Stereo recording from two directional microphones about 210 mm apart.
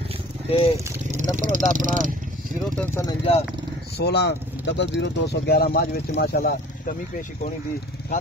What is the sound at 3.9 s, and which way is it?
Speech, 50° left (ahead or behind).